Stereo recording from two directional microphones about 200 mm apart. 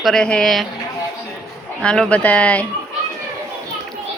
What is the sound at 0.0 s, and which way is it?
Speech, 5° left (ahead or behind).